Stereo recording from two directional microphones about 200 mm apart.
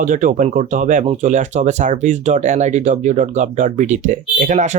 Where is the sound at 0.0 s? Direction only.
40° right (ahead or behind).